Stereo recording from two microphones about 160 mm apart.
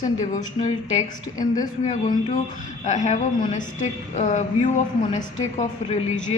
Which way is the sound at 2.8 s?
50° left (ahead or behind).